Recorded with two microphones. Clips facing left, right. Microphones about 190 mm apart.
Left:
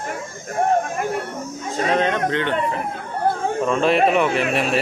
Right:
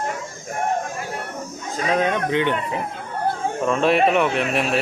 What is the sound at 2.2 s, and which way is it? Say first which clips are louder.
Speech: even; 15° right (ahead or behind).